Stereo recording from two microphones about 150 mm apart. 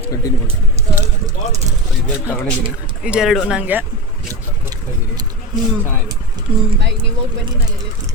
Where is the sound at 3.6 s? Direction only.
10° right (ahead or behind).